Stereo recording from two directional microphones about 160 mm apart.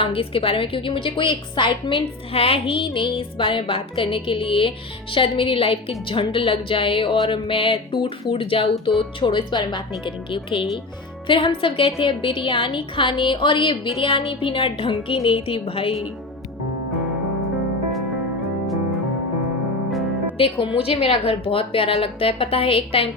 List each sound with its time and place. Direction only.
0.0 s a woman's voice: 35° left (ahead or behind)
20.4 s a woman's voice: 35° left (ahead or behind)